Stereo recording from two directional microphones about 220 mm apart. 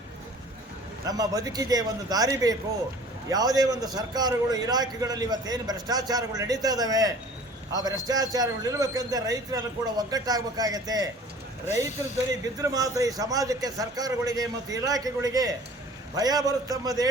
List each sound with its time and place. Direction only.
1.0 s a man's voice: 15° right (ahead or behind)
12.3 s a man's voice: 15° right (ahead or behind)